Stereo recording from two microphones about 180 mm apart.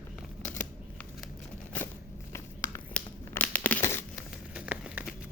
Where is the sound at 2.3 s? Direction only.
15° left (ahead or behind).